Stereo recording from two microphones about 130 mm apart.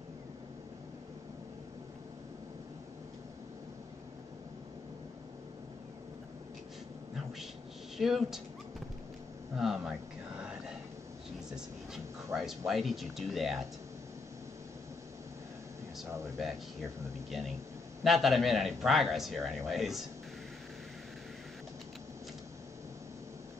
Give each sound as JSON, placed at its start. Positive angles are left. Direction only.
{"t": 8.0, "sound": "a man's voice", "side_deg": 0}
{"t": 9.6, "sound": "a man's voice", "side_deg": 0}
{"t": 10.4, "sound": "whispering", "side_deg": -5}
{"t": 11.5, "sound": "speech", "side_deg": 0}
{"t": 16.1, "sound": "a sound", "side_deg": -20}
{"t": 18.0, "sound": "a man's voice", "side_deg": 0}